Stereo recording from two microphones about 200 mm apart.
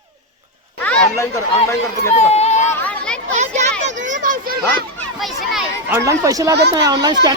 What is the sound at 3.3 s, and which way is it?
Children playing, 35° right (ahead or behind).